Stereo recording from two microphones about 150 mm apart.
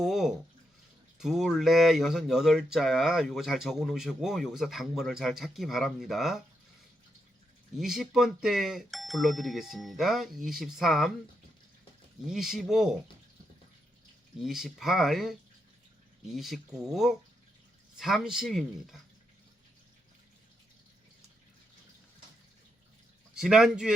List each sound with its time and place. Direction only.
0.0 s bathtub: centre (ahead or behind)
1.2 s speech: 5° right (ahead or behind)
7.8 s speech: centre (ahead or behind)
12.3 s speech: centre (ahead or behind)
14.4 s speech: centre (ahead or behind)
23.3 s speech: 5° right (ahead or behind)